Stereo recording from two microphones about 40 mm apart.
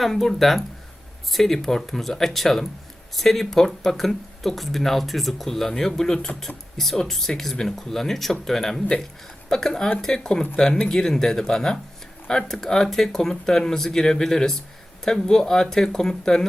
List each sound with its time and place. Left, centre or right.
0.0 s speech: centre